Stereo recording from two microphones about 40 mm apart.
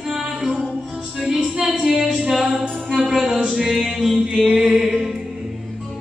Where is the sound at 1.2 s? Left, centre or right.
Centre.